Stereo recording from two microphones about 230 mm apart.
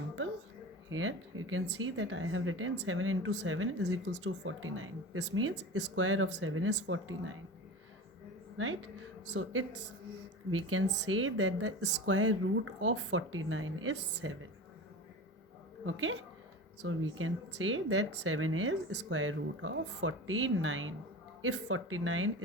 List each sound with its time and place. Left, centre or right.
0.9 s speech: right
9.3 s speech: right
11.8 s speech: right
15.9 s speech: right